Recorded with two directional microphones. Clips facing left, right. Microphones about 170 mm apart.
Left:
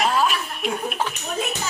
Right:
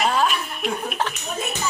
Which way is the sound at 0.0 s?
Centre (ahead or behind).